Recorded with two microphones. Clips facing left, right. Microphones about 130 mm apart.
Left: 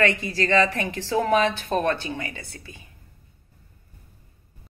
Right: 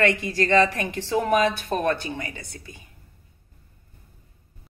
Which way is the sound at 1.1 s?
15° right (ahead or behind).